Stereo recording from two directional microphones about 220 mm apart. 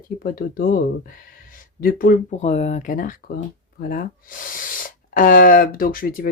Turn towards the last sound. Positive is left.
turn(degrees=40)  # may be behind; listen again after turning